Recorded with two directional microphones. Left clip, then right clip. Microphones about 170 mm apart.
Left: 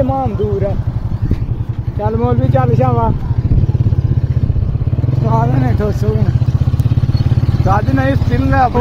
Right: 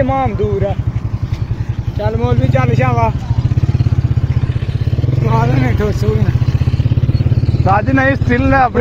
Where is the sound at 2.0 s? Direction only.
40° left (ahead or behind).